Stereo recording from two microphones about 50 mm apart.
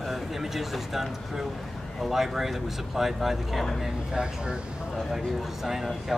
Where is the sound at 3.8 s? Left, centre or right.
Centre.